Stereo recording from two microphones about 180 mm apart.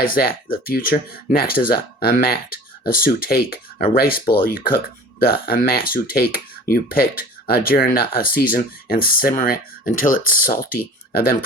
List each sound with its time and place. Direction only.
0.0 s speech: 55° left (ahead or behind)